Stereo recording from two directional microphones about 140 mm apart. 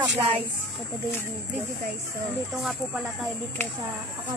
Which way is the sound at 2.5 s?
Centre (ahead or behind).